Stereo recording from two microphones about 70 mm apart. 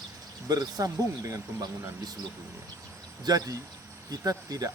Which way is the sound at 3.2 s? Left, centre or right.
Right.